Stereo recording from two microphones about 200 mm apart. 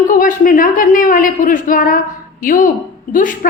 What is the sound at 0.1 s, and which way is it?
A woman's voice, 40° left (ahead or behind).